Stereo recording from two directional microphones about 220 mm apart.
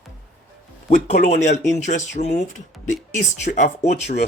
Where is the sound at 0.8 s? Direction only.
35° left (ahead or behind).